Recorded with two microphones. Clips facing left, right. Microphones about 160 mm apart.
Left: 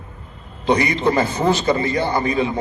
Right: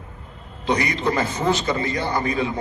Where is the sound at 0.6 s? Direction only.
25° left (ahead or behind).